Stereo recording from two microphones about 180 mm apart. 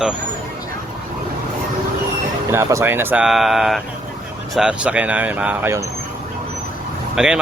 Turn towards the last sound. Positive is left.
turn(degrees=-5)  # may be behind; listen again after turning